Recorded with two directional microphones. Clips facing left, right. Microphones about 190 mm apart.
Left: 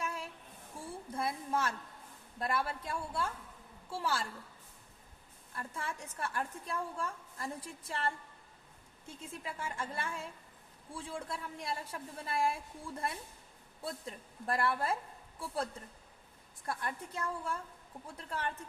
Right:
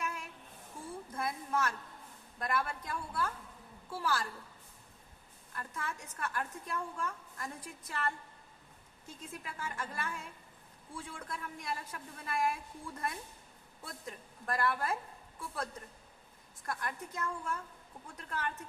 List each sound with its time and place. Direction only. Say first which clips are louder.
0.0 s a sound: left 1 dB; 30° left (ahead or behind)
1.2 s a woman's voice: even; 30° left (ahead or behind)
5.5 s a woman's voice: even; 30° left (ahead or behind)
16.6 s a woman's voice: left 1 dB; 30° left (ahead or behind)